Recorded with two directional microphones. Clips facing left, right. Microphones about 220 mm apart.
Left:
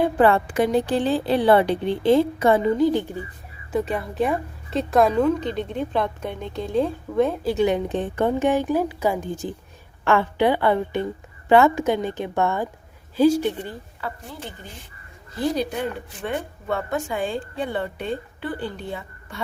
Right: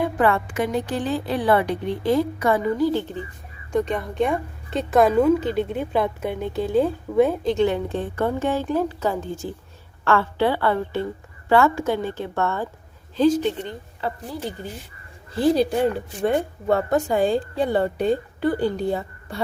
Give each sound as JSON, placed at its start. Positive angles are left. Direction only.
{"t": 0.0, "sound": "a woman's voice", "side_deg": 30}
{"t": 7.4, "sound": "a woman's voice", "side_deg": 10}
{"t": 15.4, "sound": "a woman's voice", "side_deg": -30}